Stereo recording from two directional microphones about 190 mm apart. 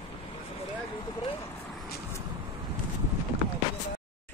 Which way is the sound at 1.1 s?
20° left (ahead or behind).